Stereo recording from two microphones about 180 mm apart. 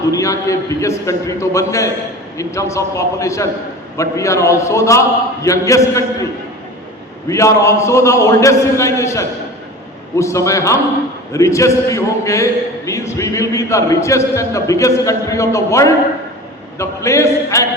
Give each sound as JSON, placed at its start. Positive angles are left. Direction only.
{"t": 0.1, "sound": "a man's voice", "side_deg": 15}
{"t": 7.3, "sound": "a man's voice", "side_deg": 15}